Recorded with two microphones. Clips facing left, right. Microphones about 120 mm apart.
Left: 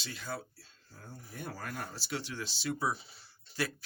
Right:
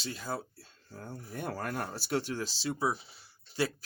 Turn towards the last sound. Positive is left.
turn(degrees=-25)  # may be behind; listen again after turning